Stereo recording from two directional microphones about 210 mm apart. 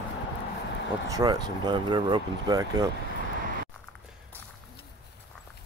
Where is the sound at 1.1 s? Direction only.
20° right (ahead or behind).